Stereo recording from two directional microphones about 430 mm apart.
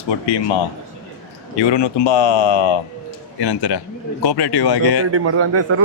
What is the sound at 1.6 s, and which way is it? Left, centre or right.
Speech, left.